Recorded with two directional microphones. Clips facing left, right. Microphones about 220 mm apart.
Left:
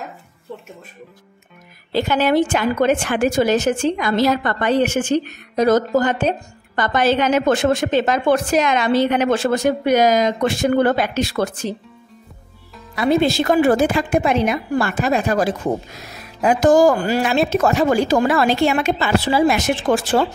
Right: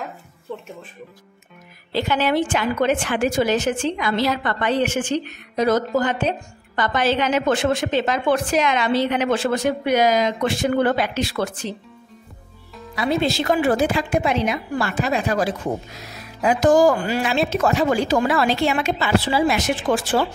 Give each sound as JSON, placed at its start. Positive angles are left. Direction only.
{"t": 1.9, "sound": "a woman's voice", "side_deg": 45}
{"t": 12.9, "sound": "a woman's voice", "side_deg": 50}